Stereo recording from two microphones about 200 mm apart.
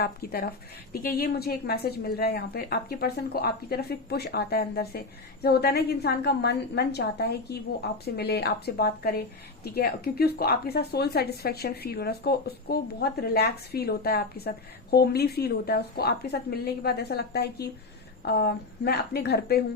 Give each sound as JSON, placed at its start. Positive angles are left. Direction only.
{"t": 0.0, "sound": "a woman's voice", "side_deg": 50}